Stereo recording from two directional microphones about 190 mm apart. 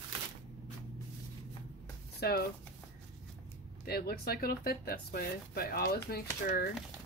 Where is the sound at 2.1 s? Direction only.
55° left (ahead or behind).